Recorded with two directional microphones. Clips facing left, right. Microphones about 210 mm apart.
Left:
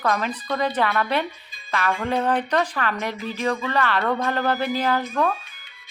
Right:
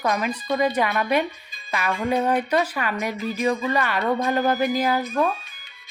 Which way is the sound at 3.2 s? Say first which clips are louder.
Right 3 dB; 40° right (ahead or behind).